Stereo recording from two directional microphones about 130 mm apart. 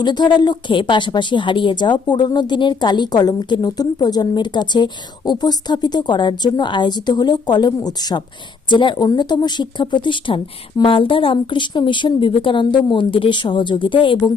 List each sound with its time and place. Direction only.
0.0 s a woman's voice: 35° left (ahead or behind)